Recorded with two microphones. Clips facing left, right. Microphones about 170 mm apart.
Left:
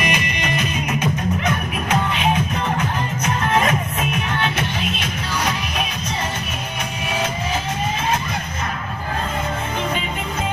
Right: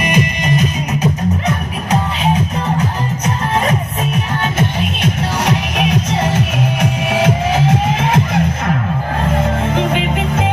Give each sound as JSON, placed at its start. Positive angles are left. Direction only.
{"t": 0.0, "sound": "music", "side_deg": -45}
{"t": 4.6, "sound": "music", "side_deg": -65}